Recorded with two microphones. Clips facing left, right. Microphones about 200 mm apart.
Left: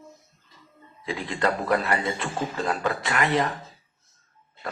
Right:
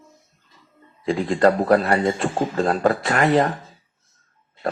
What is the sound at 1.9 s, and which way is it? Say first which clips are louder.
Speech: right 7 dB; 35° right (ahead or behind).